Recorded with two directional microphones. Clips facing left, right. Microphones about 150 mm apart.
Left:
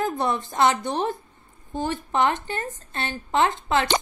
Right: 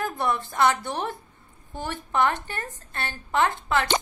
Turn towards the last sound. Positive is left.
turn(degrees=20)  # may be behind; listen again after turning